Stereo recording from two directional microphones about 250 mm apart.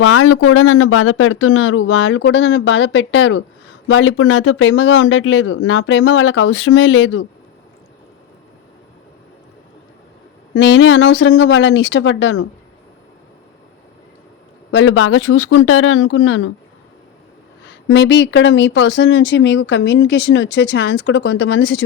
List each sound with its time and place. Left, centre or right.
0.0 s speech: left
10.5 s speech: left
14.7 s speech: left
17.7 s speech: left